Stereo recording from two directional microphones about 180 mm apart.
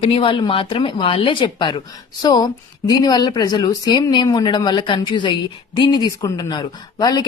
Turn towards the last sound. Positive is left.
turn(degrees=25)  # may be behind; listen again after turning